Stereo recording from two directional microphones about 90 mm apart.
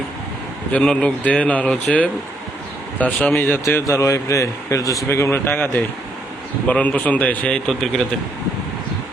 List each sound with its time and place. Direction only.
0.7 s speech: 15° left (ahead or behind)
3.8 s speech: 30° left (ahead or behind); by 7.6 s 15° left (ahead or behind)
7.7 s speech: centre (ahead or behind)